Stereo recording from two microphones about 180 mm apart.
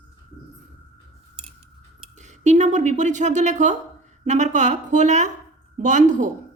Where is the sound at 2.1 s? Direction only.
40° right (ahead or behind).